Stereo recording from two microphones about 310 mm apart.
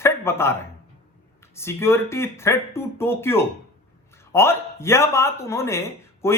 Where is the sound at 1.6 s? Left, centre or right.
Centre.